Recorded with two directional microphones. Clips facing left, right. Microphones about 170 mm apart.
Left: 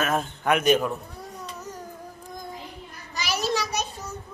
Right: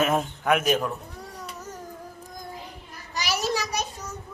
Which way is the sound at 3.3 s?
10° right (ahead or behind).